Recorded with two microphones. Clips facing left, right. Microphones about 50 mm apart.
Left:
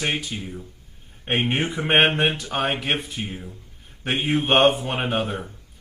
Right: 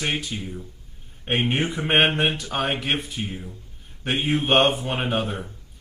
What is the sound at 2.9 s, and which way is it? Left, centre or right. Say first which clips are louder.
Speech: even; left.